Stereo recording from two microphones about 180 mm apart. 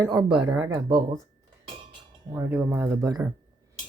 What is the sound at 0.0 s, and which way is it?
Speech, 25° right (ahead or behind).